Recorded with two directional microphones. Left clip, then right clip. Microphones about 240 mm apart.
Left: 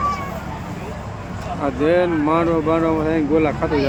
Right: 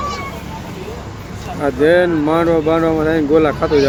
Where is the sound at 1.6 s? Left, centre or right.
Centre.